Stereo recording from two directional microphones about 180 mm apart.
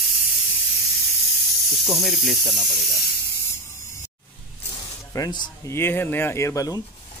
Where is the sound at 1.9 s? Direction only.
Centre (ahead or behind).